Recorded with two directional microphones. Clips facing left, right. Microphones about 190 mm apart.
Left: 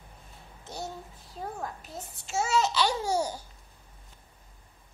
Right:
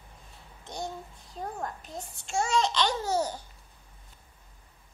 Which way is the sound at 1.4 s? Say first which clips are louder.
Right 1 dB; 5° left (ahead or behind).